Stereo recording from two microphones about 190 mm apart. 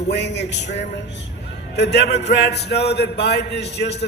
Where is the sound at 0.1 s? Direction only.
65° left (ahead or behind).